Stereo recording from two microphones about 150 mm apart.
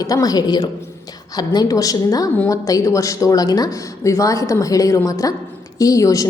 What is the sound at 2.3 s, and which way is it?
A woman's voice, 10° left (ahead or behind).